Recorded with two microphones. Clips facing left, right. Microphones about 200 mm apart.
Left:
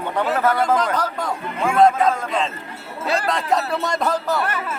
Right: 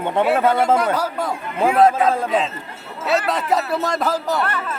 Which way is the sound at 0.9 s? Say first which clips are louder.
Right 1 dB; 5° right (ahead or behind).